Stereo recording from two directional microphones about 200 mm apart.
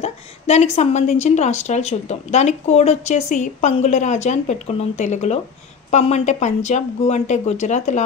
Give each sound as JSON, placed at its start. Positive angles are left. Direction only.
{"t": 0.0, "sound": "a woman's voice", "side_deg": 35}